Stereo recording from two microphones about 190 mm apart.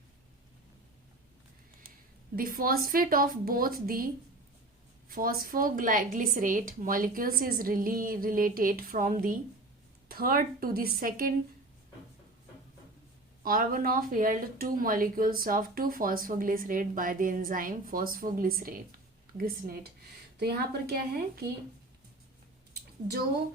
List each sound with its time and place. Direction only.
2.3 s speech: 50° right (ahead or behind)
13.4 s speech: 50° right (ahead or behind)